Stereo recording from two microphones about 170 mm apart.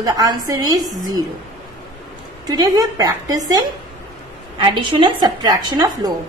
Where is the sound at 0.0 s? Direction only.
20° right (ahead or behind).